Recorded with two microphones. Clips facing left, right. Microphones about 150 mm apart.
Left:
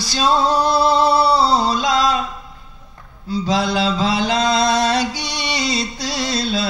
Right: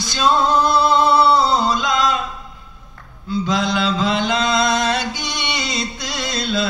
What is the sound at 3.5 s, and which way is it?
Mantra, 35° left (ahead or behind).